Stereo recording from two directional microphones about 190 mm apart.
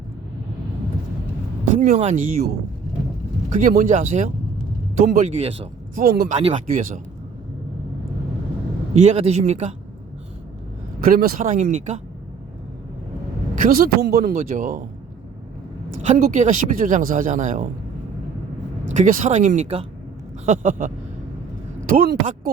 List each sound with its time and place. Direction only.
1.8 s speech: 35° right (ahead or behind)
3.6 s speech: 40° right (ahead or behind)
6.3 s speech: 35° right (ahead or behind)
8.9 s speech: 35° right (ahead or behind)
11.0 s speech: 50° right (ahead or behind)
13.6 s speech: 50° right (ahead or behind)
16.0 s speech: 45° right (ahead or behind)
18.9 s speech: 40° right (ahead or behind)